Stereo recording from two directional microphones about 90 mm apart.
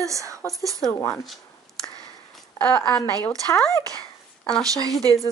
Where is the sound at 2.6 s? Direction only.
20° left (ahead or behind).